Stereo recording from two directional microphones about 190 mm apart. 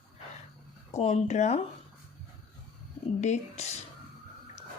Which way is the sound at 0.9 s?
35° left (ahead or behind).